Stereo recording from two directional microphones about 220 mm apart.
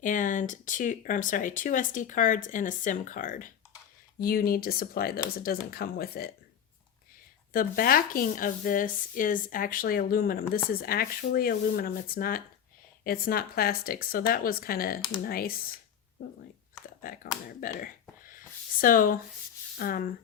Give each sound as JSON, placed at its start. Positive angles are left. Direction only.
{"t": 0.0, "sound": "speech", "side_deg": 35}
{"t": 7.5, "sound": "speech", "side_deg": 40}
{"t": 17.0, "sound": "speech", "side_deg": 40}
{"t": 18.3, "sound": "a sound", "side_deg": 40}
{"t": 19.7, "sound": "speech", "side_deg": 40}